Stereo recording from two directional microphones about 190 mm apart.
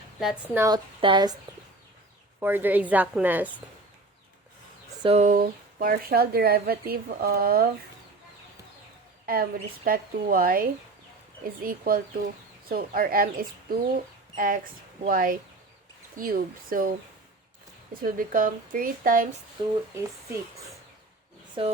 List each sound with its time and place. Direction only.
0.5 s a woman's voice: 15° right (ahead or behind)
2.4 s a woman's voice: 10° right (ahead or behind)
5.0 s speech: 40° right (ahead or behind)
9.2 s speech: 50° right (ahead or behind)
17.9 s speech: 45° right (ahead or behind)
21.6 s speech: 30° right (ahead or behind)